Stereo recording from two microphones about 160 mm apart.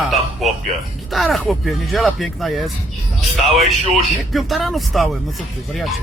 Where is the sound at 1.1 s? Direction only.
Centre (ahead or behind).